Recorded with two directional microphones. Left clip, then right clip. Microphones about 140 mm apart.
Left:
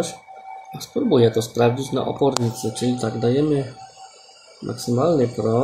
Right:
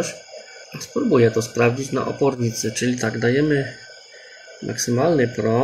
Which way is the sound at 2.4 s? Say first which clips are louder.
Right 1 dB; 20° left (ahead or behind).